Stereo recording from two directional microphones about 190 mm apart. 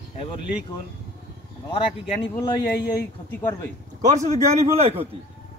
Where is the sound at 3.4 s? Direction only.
10° left (ahead or behind).